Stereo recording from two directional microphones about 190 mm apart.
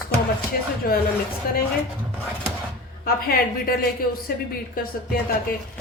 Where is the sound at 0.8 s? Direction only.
50° left (ahead or behind).